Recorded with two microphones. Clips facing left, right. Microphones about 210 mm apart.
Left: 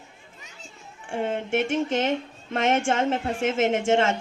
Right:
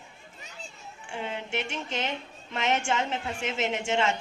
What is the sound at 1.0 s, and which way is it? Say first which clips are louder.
Speech: left 8 dB; 50° left (ahead or behind).